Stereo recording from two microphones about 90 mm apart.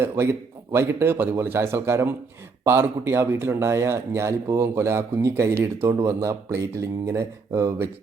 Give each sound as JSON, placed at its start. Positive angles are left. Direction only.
{"t": 0.7, "sound": "speech", "side_deg": -30}